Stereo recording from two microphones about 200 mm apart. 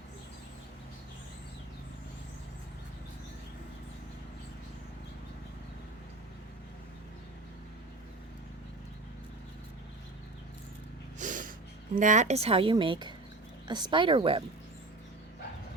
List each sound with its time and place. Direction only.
11.2 s snort: 40° right (ahead or behind)
11.9 s speech: 40° right (ahead or behind)